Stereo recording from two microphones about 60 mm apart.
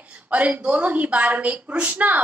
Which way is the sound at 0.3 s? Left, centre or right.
Right.